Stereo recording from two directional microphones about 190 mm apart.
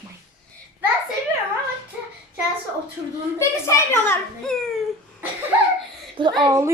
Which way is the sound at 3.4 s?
15° left (ahead or behind).